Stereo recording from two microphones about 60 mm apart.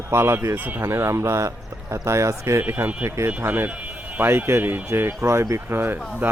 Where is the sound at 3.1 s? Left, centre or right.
Right.